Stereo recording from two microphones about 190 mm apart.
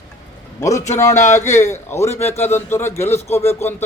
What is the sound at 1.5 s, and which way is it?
Speech, 15° left (ahead or behind).